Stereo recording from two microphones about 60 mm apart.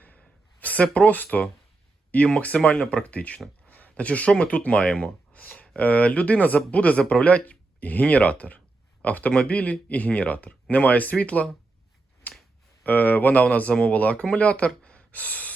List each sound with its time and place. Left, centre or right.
0.6 s speech: left
12.8 s speech: left